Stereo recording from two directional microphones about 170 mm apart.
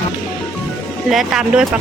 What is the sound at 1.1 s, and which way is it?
Speech, centre (ahead or behind).